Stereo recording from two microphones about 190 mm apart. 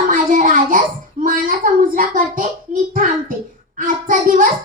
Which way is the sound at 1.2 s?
45° right (ahead or behind).